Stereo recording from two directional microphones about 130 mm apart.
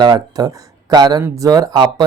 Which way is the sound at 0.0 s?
30° right (ahead or behind).